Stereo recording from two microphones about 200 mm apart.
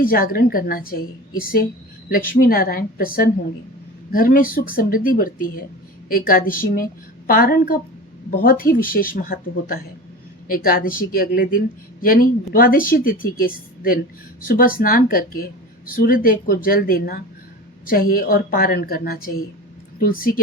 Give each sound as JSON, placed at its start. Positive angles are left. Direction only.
{"t": 0.0, "sound": "speech", "side_deg": 45}
{"t": 2.0, "sound": "speech", "side_deg": 45}